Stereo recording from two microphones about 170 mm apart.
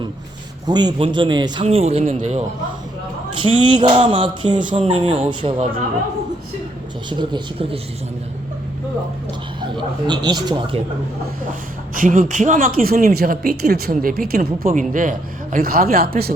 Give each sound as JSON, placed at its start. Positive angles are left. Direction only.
{"t": 0.7, "sound": "speech", "side_deg": -25}
{"t": 1.6, "sound": "speech", "side_deg": -40}
{"t": 3.3, "sound": "speech", "side_deg": -30}
{"t": 7.1, "sound": "speech", "side_deg": -25}
{"t": 9.6, "sound": "speech", "side_deg": -25}
{"t": 11.9, "sound": "a woman's voice", "side_deg": -50}